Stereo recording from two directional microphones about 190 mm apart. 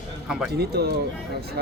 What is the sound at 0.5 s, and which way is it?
Speech, 55° right (ahead or behind).